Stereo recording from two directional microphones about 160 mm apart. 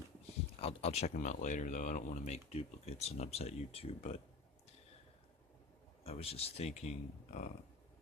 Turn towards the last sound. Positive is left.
turn(degrees=45)  # may be behind; listen again after turning